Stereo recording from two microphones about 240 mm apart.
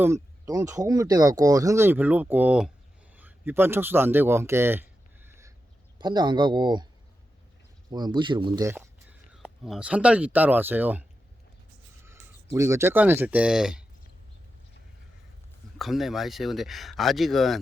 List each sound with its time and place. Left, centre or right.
0.0 s speech: centre
7.9 s speech: centre
12.0 s speech: centre
15.8 s speech: centre